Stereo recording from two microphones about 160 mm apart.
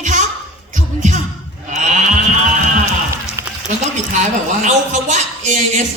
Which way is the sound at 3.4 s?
15° right (ahead or behind).